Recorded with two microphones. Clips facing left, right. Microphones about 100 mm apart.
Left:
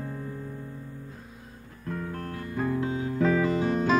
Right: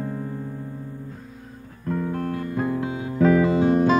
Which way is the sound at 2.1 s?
20° right (ahead or behind).